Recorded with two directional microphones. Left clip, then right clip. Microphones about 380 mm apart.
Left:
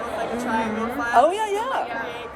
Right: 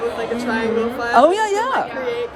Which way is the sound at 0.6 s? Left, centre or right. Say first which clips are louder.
Right 5 dB; centre.